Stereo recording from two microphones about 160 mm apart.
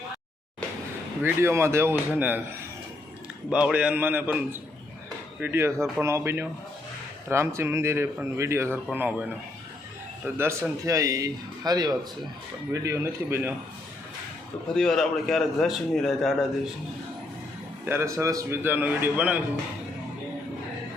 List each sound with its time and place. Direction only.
1.2 s speech: 15° right (ahead or behind)
3.5 s speech: 5° right (ahead or behind)
10.2 s speech: 15° right (ahead or behind)
14.7 s a man's voice: 5° left (ahead or behind)
17.8 s speech: 15° right (ahead or behind)